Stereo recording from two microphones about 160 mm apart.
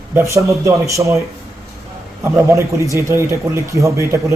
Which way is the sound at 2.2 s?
20° right (ahead or behind).